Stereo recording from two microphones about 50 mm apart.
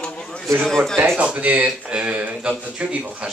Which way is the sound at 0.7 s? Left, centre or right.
Centre.